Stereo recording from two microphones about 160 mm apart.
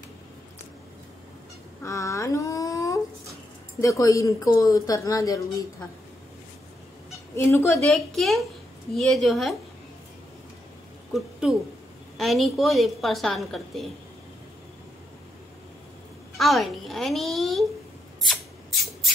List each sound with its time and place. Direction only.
1.8 s a sound: 20° left (ahead or behind)
3.8 s speech: 20° left (ahead or behind)
7.3 s speech: 15° left (ahead or behind)
7.8 s a woman's voice: centre (ahead or behind)
11.1 s a woman's voice: 5° right (ahead or behind)
16.3 s a woman's voice: centre (ahead or behind)